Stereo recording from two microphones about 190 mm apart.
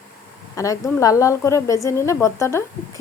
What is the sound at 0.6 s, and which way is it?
A woman's voice, 15° left (ahead or behind).